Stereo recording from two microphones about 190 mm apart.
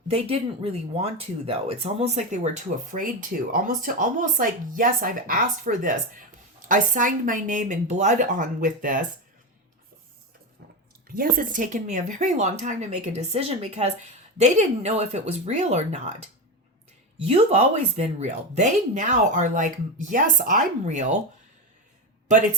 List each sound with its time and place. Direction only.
0.1 s speech: 30° right (ahead or behind)
11.1 s speech: 50° right (ahead or behind)